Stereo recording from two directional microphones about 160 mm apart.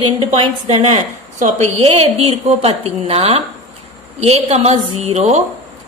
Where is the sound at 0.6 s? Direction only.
45° right (ahead or behind).